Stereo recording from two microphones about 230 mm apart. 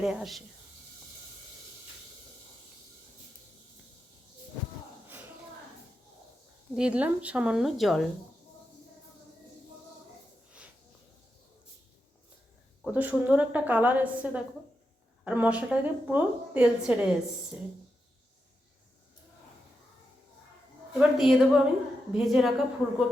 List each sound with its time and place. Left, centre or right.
0.0 s a woman's voice: centre
6.7 s a woman's voice: centre
12.8 s a woman's voice: centre
21.0 s a woman's voice: centre